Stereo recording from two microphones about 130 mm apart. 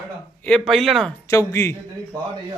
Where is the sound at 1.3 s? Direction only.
20° left (ahead or behind).